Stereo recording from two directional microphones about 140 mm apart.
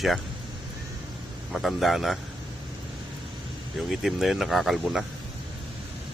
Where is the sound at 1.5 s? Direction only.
Centre (ahead or behind).